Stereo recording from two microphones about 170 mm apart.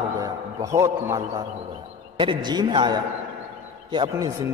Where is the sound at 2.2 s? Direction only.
25° right (ahead or behind).